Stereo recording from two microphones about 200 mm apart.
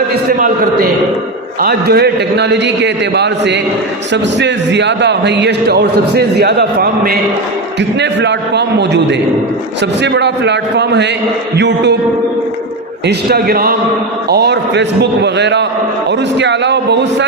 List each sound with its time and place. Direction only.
0.3 s a man's voice: 45° right (ahead or behind)
13.1 s a man's voice: 50° right (ahead or behind)